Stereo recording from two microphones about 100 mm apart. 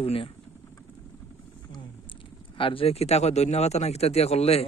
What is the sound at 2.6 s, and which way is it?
A man's voice, 65° left (ahead or behind).